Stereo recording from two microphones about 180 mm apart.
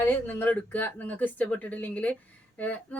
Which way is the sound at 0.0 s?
10° left (ahead or behind).